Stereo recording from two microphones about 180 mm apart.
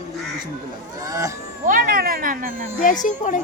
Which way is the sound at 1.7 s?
50° right (ahead or behind).